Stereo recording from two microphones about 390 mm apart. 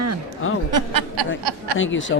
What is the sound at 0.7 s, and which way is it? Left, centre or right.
Speech, right.